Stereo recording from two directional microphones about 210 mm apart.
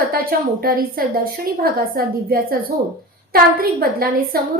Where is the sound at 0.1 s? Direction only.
45° right (ahead or behind).